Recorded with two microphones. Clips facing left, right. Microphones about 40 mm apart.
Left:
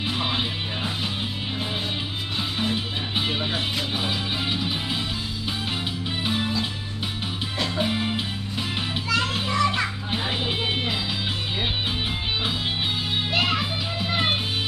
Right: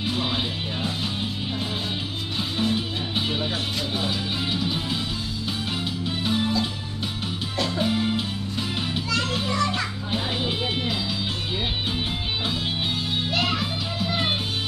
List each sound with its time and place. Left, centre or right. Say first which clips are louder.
0.0 s music: even; centre
2.6 s music: right 4 dB; centre
6.0 s music: right 2 dB; centre
13.3 s music: left 2 dB; centre